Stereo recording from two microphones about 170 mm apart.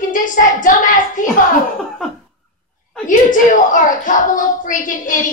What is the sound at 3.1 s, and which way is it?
A child's voice, 50° left (ahead or behind).